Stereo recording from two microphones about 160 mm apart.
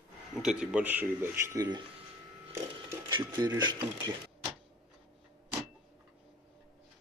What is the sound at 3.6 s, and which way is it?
Speech, 30° right (ahead or behind).